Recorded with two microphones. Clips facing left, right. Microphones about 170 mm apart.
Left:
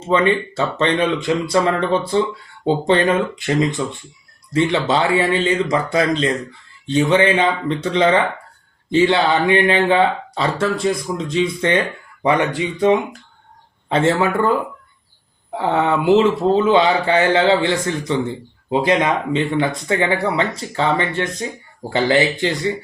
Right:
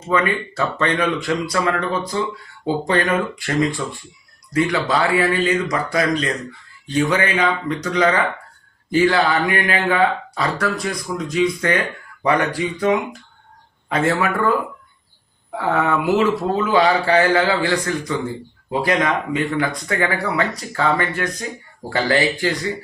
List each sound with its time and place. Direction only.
0.1 s speech: 25° left (ahead or behind)
15.5 s speech: 25° left (ahead or behind)